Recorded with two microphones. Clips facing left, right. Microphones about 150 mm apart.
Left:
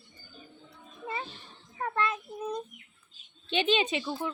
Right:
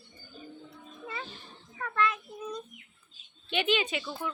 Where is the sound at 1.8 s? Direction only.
30° left (ahead or behind).